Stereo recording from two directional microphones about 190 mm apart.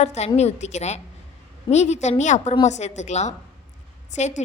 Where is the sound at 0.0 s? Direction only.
35° left (ahead or behind).